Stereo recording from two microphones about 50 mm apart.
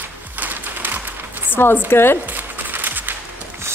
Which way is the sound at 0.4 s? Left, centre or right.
Right.